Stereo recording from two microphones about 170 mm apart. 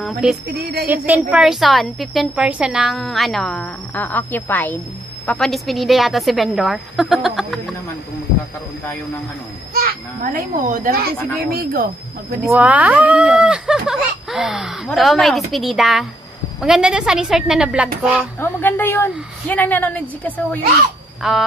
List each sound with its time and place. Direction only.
0.0 s speech: 5° right (ahead or behind)
0.6 s speech: 70° right (ahead or behind)
0.8 s a woman's voice: 10° right (ahead or behind)
9.8 s a child's voice: 60° right (ahead or behind)
12.4 s speech: 10° right (ahead or behind)
18.4 s a woman's voice: 10° left (ahead or behind)
21.2 s a sound: centre (ahead or behind)